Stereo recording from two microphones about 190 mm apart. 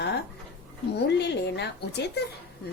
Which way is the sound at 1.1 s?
65° left (ahead or behind).